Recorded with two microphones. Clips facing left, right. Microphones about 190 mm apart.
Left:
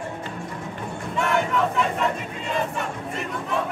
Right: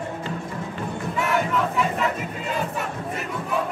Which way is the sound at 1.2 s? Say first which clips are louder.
Left 1 dB; 5° right (ahead or behind).